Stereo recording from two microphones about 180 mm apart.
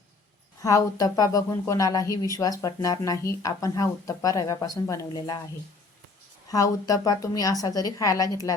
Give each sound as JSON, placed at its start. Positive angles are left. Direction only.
{"t": 0.6, "sound": "speech", "side_deg": 20}
{"t": 6.5, "sound": "speech", "side_deg": 20}